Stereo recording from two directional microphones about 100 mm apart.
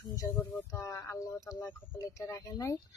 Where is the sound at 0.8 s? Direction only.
30° left (ahead or behind).